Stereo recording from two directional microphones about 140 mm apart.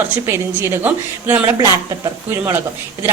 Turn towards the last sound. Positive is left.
turn(degrees=-15)  # may be behind; listen again after turning